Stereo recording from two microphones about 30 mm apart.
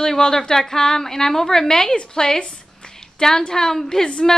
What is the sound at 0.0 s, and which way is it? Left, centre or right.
A woman's voice, centre.